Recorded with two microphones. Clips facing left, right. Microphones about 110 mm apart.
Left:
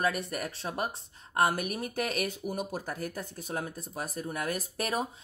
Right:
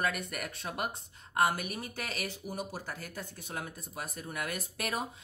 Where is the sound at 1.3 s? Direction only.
40° left (ahead or behind).